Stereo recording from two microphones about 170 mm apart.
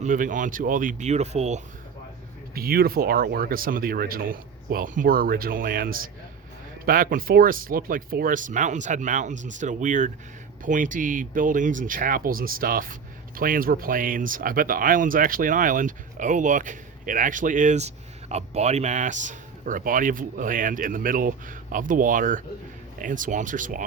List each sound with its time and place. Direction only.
0.0 s speech: 50° right (ahead or behind)
2.6 s speech: 60° right (ahead or behind)